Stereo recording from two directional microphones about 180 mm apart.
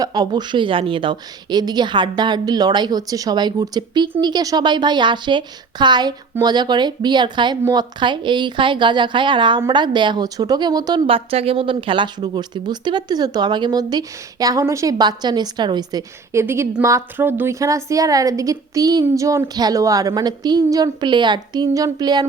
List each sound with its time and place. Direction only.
0.0 s a woman's voice: 20° right (ahead or behind)